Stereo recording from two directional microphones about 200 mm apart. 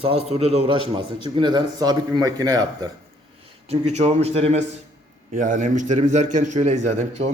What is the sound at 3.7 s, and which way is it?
A man's voice, 35° right (ahead or behind).